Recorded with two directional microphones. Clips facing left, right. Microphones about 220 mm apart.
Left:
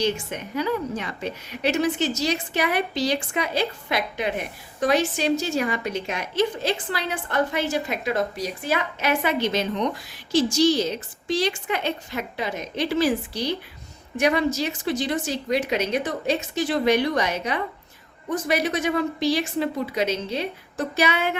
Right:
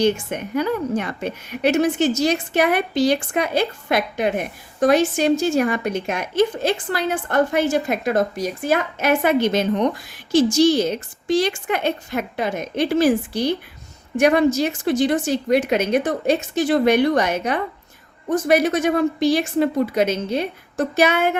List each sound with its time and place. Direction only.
0.0 s a woman's voice: 50° right (ahead or behind)